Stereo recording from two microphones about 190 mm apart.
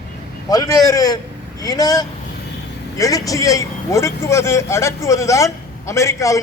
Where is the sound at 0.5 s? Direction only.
20° left (ahead or behind).